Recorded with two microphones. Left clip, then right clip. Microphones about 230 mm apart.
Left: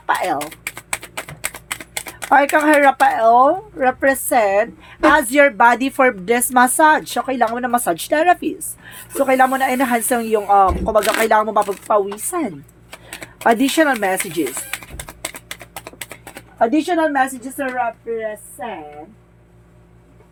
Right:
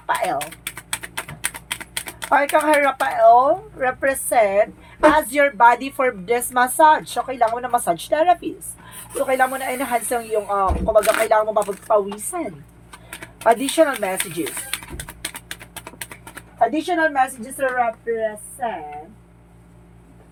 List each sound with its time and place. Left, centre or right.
0.0 s a sound: left
0.8 s typing: centre
2.3 s a woman's voice: left
16.6 s a woman's voice: left